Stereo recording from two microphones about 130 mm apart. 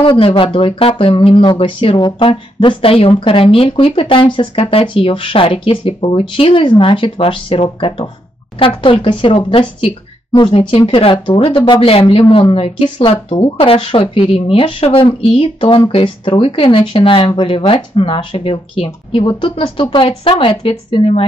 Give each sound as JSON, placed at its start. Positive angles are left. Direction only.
{"t": 0.0, "sound": "speech", "side_deg": 45}